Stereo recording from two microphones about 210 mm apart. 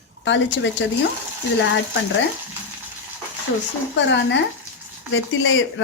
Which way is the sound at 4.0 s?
60° left (ahead or behind).